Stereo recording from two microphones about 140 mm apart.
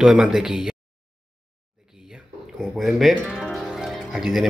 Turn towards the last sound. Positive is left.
turn(degrees=-5)  # may be behind; listen again after turning